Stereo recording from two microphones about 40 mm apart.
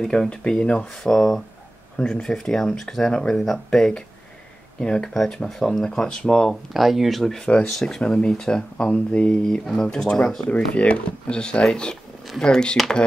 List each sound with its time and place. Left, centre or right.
0.1 s speech: left
0.8 s speech: centre
4.7 s speech: left
6.5 s speech: centre
7.3 s speech: left
7.6 s speech: centre
8.0 s speech: left
10.5 s speech: left